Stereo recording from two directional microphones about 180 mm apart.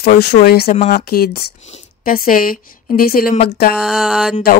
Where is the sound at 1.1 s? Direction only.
60° left (ahead or behind).